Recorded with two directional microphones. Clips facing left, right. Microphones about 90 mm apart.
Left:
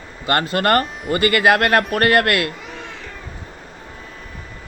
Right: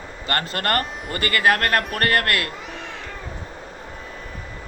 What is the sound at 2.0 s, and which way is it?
Speech, 15° left (ahead or behind).